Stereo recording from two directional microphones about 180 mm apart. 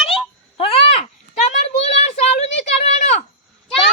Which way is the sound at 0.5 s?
30° left (ahead or behind).